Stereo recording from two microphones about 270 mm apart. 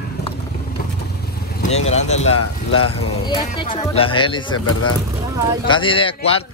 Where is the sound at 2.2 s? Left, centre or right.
Left.